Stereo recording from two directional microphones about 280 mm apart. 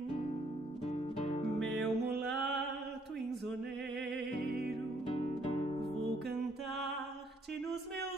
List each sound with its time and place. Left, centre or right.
0.8 s music: left
1.6 s music: centre
5.1 s music: centre